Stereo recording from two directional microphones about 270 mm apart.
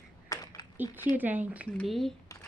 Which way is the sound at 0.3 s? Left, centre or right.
Centre.